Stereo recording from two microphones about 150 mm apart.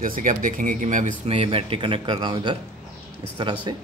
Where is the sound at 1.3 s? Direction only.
40° right (ahead or behind).